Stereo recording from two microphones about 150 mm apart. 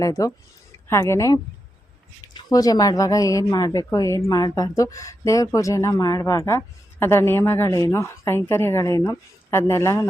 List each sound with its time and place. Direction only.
0.0 s a woman's voice: 20° left (ahead or behind)